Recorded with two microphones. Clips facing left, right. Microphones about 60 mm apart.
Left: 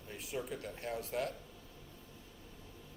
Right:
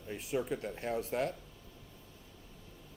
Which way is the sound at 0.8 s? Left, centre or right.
Right.